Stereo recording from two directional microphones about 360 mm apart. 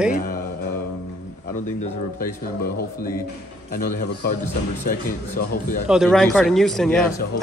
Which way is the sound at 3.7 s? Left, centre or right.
Left.